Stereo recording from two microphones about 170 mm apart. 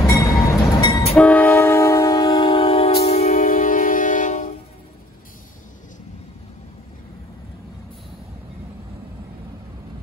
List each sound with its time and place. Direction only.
0.0 s train: 20° left (ahead or behind)
1.1 s train: 10° left (ahead or behind); by 4.5 s 50° left (ahead or behind)